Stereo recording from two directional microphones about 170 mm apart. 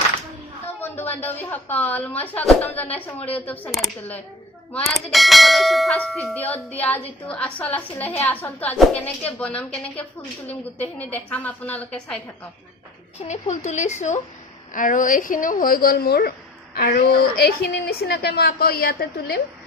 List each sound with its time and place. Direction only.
0.8 s a woman's voice: 10° left (ahead or behind)
3.2 s speech: 35° left (ahead or behind)
3.4 s a woman's voice: 10° left (ahead or behind)
3.7 s bell: centre (ahead or behind)
6.5 s speech: 35° left (ahead or behind)
6.8 s a woman's voice: 10° left (ahead or behind)
13.2 s a woman's voice: 45° left (ahead or behind); by 19.4 s 65° left (ahead or behind)